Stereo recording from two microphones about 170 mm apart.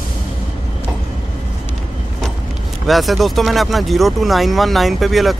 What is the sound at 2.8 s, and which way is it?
Speech, centre (ahead or behind).